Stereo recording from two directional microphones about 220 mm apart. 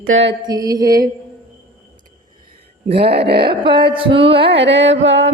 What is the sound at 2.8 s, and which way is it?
Mantra, 45° right (ahead or behind).